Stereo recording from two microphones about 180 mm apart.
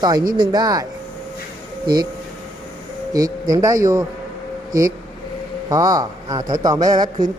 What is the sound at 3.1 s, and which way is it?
Speech, 20° right (ahead or behind).